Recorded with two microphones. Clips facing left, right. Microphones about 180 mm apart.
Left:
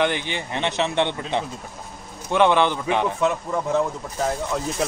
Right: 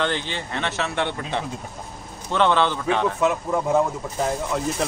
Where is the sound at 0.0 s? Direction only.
15° left (ahead or behind).